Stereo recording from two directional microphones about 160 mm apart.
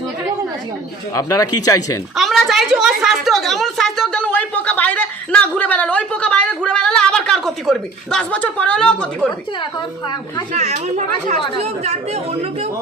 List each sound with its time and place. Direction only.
1.1 s a woman's voice: 20° left (ahead or behind)
2.1 s a woman's voice: centre (ahead or behind)
9.6 s a woman's voice: 30° left (ahead or behind)
10.5 s speech: 45° right (ahead or behind)